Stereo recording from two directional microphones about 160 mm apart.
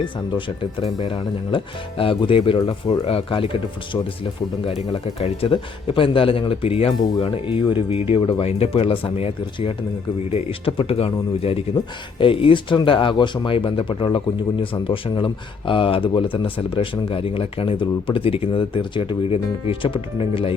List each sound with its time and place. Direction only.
0.0 s speech: 30° left (ahead or behind)
4.6 s speech: 40° left (ahead or behind)